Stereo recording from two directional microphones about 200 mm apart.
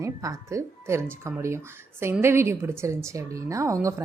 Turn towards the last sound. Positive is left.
turn(degrees=-15)  # may be behind; listen again after turning